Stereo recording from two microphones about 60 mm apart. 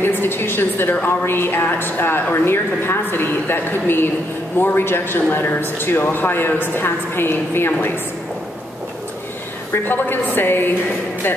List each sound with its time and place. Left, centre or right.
0.0 s a woman's voice: left
9.8 s speech: left